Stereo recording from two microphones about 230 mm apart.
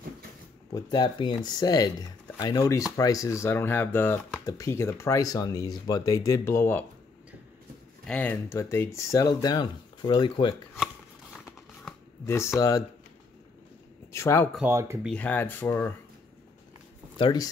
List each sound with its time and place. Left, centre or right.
0.7 s speech: centre
8.1 s speech: centre
11.4 s shuffling cards: centre
12.5 s speech: centre
14.1 s speech: centre
14.5 s speech: centre
15.0 s speech: centre
17.2 s speech: centre